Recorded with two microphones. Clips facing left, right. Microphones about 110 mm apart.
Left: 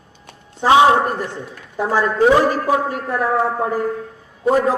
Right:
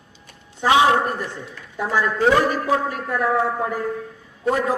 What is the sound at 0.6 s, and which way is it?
A man's voice, 30° left (ahead or behind).